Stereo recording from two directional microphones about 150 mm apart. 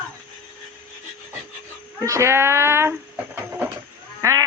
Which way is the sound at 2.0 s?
20° right (ahead or behind).